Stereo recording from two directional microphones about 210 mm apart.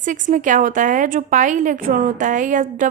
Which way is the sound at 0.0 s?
40° right (ahead or behind).